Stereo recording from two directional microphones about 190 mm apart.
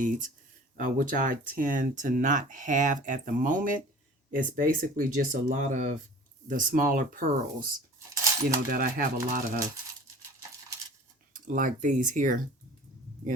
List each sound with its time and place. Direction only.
0.8 s speech: 45° right (ahead or behind)
8.1 s cutlery: 15° right (ahead or behind)
8.7 s speech: 50° right (ahead or behind)
11.3 s speech: 45° right (ahead or behind)